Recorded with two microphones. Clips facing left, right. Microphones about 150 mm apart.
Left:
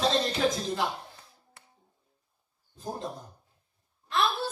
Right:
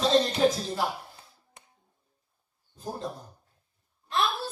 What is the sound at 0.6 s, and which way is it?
Speech, 35° right (ahead or behind).